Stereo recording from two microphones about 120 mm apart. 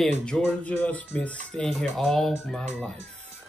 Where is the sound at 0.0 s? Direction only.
5° left (ahead or behind).